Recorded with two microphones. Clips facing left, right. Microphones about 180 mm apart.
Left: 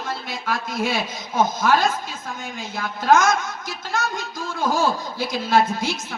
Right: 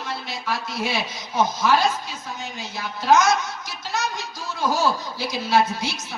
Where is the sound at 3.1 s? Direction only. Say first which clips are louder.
Left 1 dB; 50° left (ahead or behind).